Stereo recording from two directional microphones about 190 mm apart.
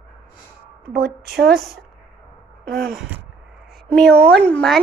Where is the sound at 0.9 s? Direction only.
55° right (ahead or behind).